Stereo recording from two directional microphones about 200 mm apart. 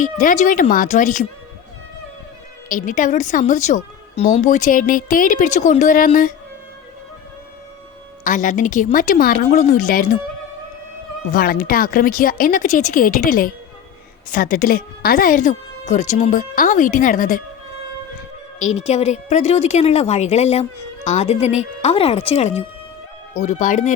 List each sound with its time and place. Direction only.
0.0 s a woman's voice: 40° left (ahead or behind)
2.6 s a woman's voice: 40° left (ahead or behind)
8.2 s a woman's voice: 40° left (ahead or behind)
11.3 s a woman's voice: 45° left (ahead or behind)
18.6 s a woman's voice: 35° left (ahead or behind)